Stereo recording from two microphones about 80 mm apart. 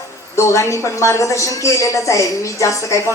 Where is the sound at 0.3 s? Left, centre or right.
Left.